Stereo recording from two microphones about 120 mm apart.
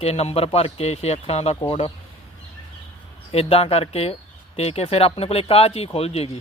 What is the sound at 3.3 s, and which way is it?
Speech, 55° left (ahead or behind).